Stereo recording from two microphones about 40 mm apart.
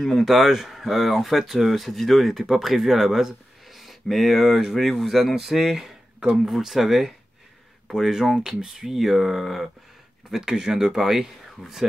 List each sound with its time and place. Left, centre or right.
0.0 s speech: centre
8.4 s speech: right; by 9.7 s centre
10.3 s speech: centre